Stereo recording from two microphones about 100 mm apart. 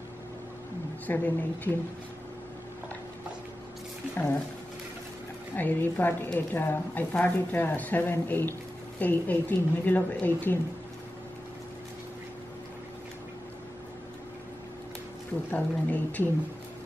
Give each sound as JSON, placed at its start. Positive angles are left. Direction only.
{"t": 1.0, "sound": "speech", "side_deg": 15}
{"t": 5.6, "sound": "speech", "side_deg": 20}
{"t": 15.5, "sound": "speech", "side_deg": 15}